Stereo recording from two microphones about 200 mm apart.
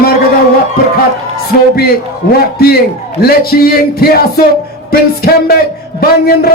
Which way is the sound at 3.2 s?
50° left (ahead or behind).